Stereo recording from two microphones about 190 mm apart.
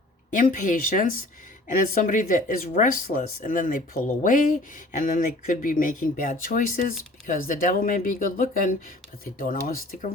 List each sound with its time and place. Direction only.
0.3 s speech: 45° left (ahead or behind)